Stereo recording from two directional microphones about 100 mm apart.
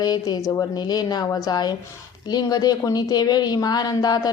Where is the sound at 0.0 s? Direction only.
45° left (ahead or behind).